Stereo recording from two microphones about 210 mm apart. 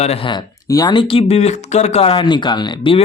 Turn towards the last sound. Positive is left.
turn(degrees=25)  # may be behind; listen again after turning